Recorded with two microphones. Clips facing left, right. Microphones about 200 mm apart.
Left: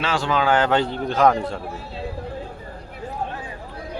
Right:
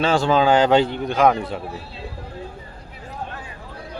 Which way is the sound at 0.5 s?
15° right (ahead or behind).